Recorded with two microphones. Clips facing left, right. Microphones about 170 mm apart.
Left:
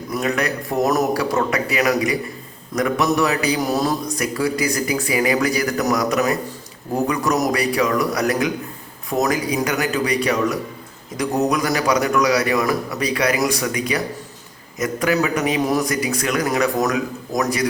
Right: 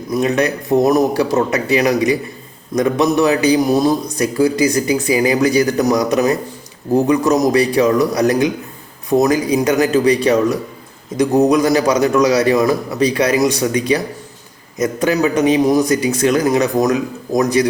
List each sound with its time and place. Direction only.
0.1 s speech: 25° right (ahead or behind)